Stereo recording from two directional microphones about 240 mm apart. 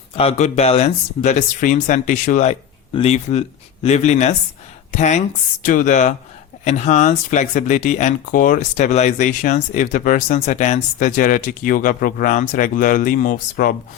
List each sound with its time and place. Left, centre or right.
0.2 s speech: left